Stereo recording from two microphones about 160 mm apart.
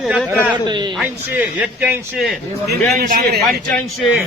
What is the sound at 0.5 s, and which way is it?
Speech, 25° right (ahead or behind).